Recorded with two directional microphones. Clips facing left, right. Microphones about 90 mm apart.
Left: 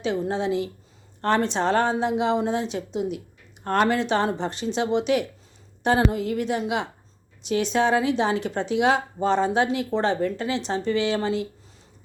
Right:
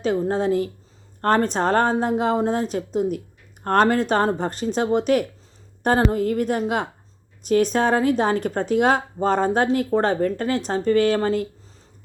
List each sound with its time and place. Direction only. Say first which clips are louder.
0.0 s speech: right 4 dB; 45° right (ahead or behind)